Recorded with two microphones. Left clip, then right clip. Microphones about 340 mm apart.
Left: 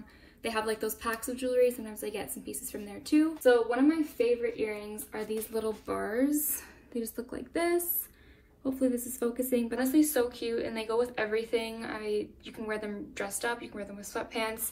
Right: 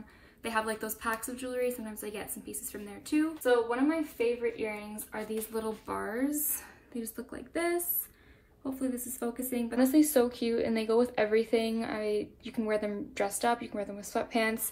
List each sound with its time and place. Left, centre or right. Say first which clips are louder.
0.4 s a woman's voice: left 1 dB; centre
8.6 s a woman's voice: left 5 dB; centre
9.8 s speech: right 4 dB; centre